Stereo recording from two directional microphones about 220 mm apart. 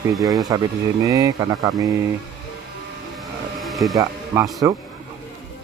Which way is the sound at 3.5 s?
Centre (ahead or behind).